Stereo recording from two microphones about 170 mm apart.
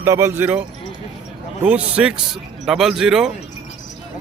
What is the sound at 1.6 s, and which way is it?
Speech, 5° right (ahead or behind).